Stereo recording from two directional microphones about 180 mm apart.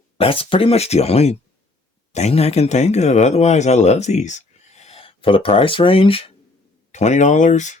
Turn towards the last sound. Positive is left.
turn(degrees=40)  # may be behind; listen again after turning